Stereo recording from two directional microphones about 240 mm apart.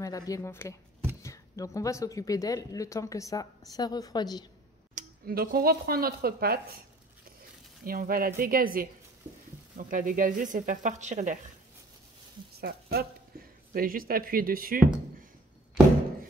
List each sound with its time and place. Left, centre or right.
0.0 s speech: centre
4.9 s speech: right
7.8 s speech: right
12.5 s speech: right